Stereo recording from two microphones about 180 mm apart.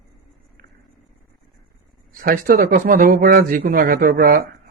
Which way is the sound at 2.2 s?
50° right (ahead or behind).